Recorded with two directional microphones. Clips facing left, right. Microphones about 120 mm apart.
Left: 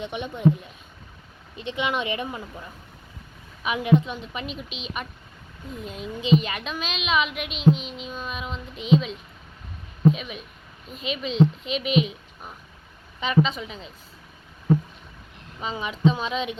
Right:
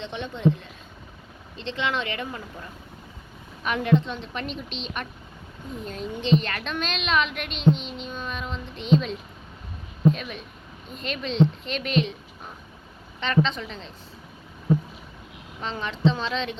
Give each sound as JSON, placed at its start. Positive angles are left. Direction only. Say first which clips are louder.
{"t": 0.0, "sound": "a woman's voice", "louder": "left 2 dB", "side_deg": 15}
{"t": 3.6, "sound": "a woman's voice", "louder": "left 1 dB", "side_deg": 10}
{"t": 15.6, "sound": "a woman's voice", "louder": "left 1 dB", "side_deg": 10}